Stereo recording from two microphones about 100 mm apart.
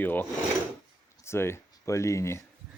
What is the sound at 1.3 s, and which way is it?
Speech, 25° left (ahead or behind).